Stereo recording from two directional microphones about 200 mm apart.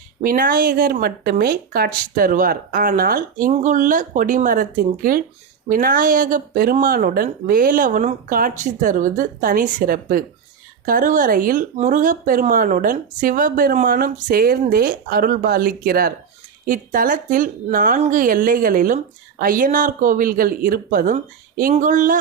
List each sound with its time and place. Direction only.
0.2 s speech: 45° right (ahead or behind)